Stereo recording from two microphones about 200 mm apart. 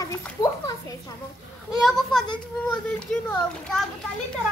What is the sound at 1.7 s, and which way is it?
A child's voice, centre (ahead or behind).